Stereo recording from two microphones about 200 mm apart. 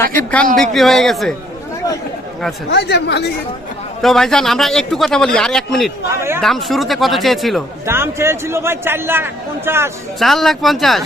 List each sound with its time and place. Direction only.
0.0 s a man's voice: 5° left (ahead or behind)
2.6 s speech: 55° left (ahead or behind)
4.0 s a man's voice: centre (ahead or behind)
7.9 s a man's voice: 10° right (ahead or behind)
10.2 s a man's voice: centre (ahead or behind)